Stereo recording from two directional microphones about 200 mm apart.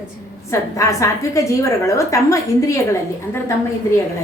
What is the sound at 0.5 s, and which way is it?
A woman's voice, 15° left (ahead or behind).